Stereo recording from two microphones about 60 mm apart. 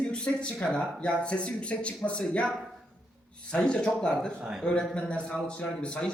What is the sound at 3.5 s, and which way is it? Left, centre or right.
A man's voice, centre.